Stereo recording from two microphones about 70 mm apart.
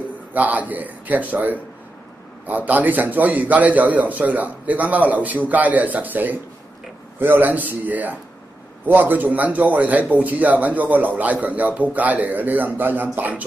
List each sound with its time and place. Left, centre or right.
0.3 s a man's voice: right